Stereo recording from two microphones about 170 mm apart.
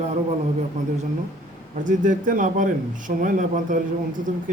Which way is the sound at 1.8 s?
50° right (ahead or behind).